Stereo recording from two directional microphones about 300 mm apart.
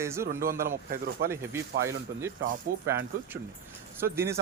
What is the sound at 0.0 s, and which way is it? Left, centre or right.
Speech, centre.